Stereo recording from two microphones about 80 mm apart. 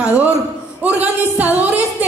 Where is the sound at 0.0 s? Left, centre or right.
Centre.